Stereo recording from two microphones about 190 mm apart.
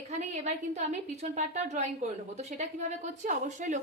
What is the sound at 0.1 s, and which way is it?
A woman's voice, 35° right (ahead or behind).